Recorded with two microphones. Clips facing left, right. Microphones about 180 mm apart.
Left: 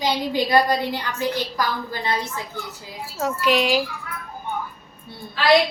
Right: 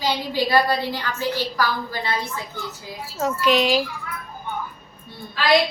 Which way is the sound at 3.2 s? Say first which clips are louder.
Right 1 dB; 10° left (ahead or behind).